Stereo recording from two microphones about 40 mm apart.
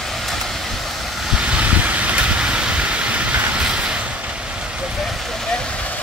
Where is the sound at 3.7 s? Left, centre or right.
Right.